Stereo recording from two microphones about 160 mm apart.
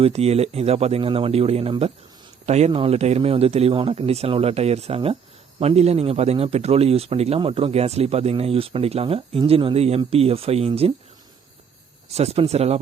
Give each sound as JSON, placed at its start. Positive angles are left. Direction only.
{"t": 0.0, "sound": "a man's voice", "side_deg": -40}
{"t": 12.1, "sound": "a man's voice", "side_deg": -40}